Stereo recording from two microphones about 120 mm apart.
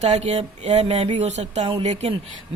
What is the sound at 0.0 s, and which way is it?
Speech, 65° right (ahead or behind).